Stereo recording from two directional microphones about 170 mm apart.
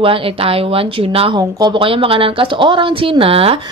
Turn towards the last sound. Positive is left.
turn(degrees=-35)  # may be behind; listen again after turning